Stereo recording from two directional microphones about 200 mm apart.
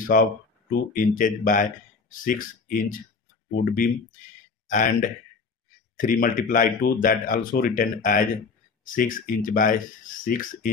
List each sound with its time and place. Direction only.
0.0 s speech: 40° left (ahead or behind)
5.9 s speech: 45° left (ahead or behind)